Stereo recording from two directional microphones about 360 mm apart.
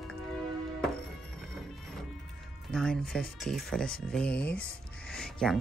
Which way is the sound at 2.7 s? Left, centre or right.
Centre.